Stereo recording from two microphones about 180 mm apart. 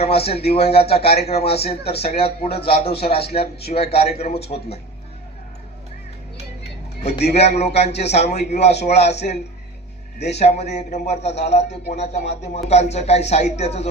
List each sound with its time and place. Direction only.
0.0 s a man's voice: 35° left (ahead or behind)
7.1 s a man's voice: 65° left (ahead or behind)
7.3 s a man's voice: 35° left (ahead or behind)
8.7 s speech: 70° left (ahead or behind)
10.3 s a man's voice: 40° left (ahead or behind)
11.7 s speech: 70° left (ahead or behind)
12.1 s a man's voice: 40° left (ahead or behind)